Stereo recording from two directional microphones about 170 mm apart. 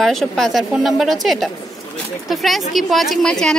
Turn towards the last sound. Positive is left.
turn(degrees=5)  # may be behind; listen again after turning